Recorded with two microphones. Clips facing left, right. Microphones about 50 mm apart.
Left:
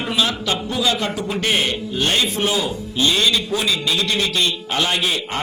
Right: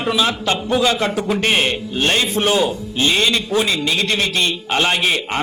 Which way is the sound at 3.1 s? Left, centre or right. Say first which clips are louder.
Right 1 dB; right.